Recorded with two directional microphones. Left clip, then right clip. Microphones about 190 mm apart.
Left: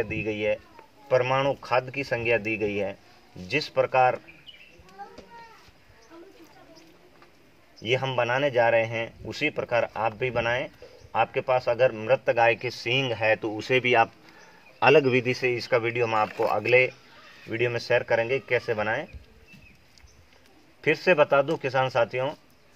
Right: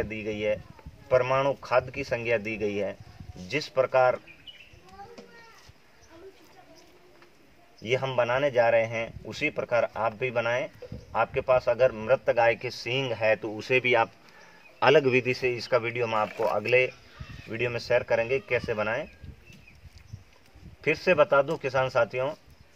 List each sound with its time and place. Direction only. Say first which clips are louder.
0.0 s a man's voice: left 2 dB; 25° left (ahead or behind)
7.8 s a man's voice: left 1 dB; 20° left (ahead or behind)
14.8 s a man's voice: left 2 dB; 5° left (ahead or behind)
20.8 s a man's voice: left 2 dB; 20° left (ahead or behind)